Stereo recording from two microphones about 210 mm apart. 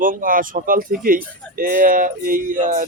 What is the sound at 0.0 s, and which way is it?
Speech, 40° right (ahead or behind).